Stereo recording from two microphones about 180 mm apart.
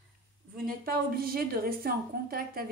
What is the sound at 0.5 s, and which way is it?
A woman's voice, 55° right (ahead or behind).